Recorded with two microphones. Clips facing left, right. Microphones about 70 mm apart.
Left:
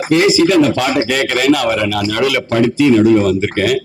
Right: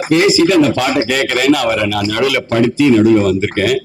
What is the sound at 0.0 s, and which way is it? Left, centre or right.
A man's voice, right.